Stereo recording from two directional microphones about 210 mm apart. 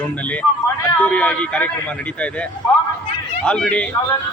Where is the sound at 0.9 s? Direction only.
5° left (ahead or behind).